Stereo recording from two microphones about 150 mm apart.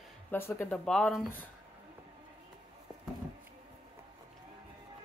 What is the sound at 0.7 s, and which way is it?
Speech, 5° left (ahead or behind).